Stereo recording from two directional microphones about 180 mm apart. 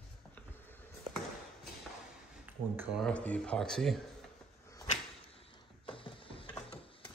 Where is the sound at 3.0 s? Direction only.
5° left (ahead or behind).